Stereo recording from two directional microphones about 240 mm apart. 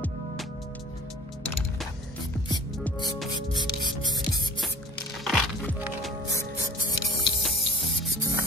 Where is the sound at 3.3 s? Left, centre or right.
Centre.